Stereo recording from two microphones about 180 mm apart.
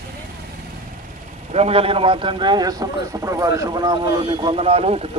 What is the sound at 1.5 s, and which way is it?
A man's voice, 35° right (ahead or behind).